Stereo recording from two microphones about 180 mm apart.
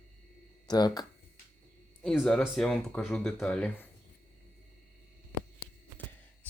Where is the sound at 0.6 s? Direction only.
20° left (ahead or behind).